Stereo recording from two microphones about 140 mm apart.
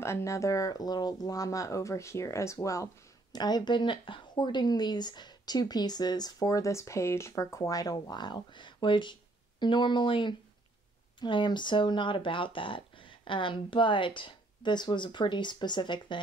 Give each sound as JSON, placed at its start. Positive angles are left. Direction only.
{"t": 0.0, "sound": "speech", "side_deg": 20}